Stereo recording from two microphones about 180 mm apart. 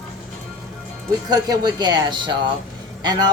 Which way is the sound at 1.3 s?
20° right (ahead or behind).